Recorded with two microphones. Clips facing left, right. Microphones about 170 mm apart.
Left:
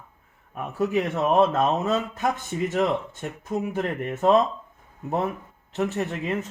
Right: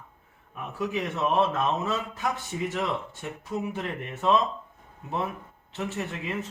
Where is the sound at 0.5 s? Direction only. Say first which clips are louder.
Left 6 dB; 50° left (ahead or behind).